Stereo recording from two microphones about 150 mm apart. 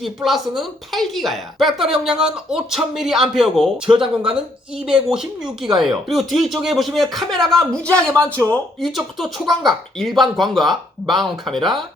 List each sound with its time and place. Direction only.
0.0 s a woman's voice: centre (ahead or behind)
4.9 s a woman's voice: 5° right (ahead or behind)
8.1 s speech: 20° right (ahead or behind)
8.8 s a woman's voice: centre (ahead or behind)